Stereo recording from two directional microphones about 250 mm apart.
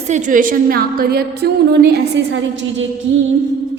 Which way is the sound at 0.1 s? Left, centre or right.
Right.